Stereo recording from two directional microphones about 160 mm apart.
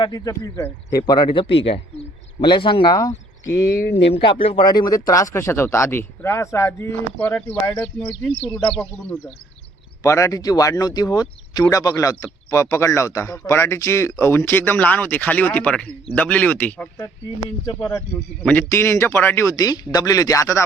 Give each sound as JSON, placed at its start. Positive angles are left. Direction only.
{"t": 0.0, "sound": "speech", "side_deg": 25}
{"t": 4.1, "sound": "a man's voice", "side_deg": 35}
{"t": 7.8, "sound": "speech", "side_deg": 35}
{"t": 10.0, "sound": "a man's voice", "side_deg": 20}
{"t": 18.4, "sound": "speech", "side_deg": 15}